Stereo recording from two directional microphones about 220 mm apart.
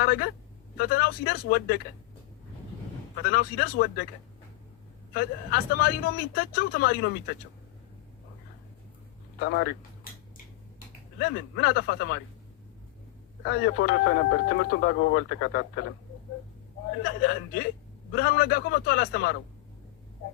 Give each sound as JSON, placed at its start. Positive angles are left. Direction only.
{"t": 0.0, "sound": "a man's voice", "side_deg": 45}
{"t": 3.2, "sound": "speech", "side_deg": 45}
{"t": 5.1, "sound": "speech", "side_deg": 45}
{"t": 9.4, "sound": "speech", "side_deg": 55}
{"t": 11.2, "sound": "speech", "side_deg": 45}
{"t": 13.4, "sound": "speech", "side_deg": 50}
{"t": 17.0, "sound": "speech", "side_deg": 45}